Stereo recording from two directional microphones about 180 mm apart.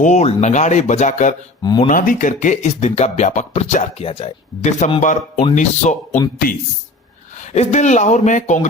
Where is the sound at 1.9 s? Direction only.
50° left (ahead or behind).